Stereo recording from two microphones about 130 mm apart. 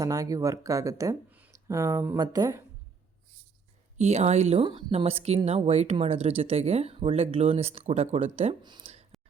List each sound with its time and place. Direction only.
0.0 s speech: 25° right (ahead or behind)
3.9 s speech: 60° right (ahead or behind)
4.6 s speech: 45° right (ahead or behind)
8.6 s speech: 35° right (ahead or behind)